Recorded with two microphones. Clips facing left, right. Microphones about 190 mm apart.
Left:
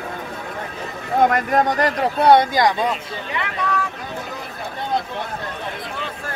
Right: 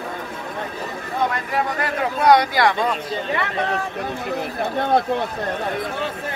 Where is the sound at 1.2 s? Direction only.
50° left (ahead or behind).